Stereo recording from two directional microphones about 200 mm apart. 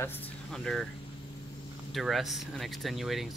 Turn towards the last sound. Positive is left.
turn(degrees=0)  # may be behind; listen again after turning